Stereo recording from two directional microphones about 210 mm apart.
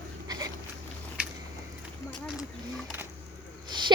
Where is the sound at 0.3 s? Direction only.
20° right (ahead or behind).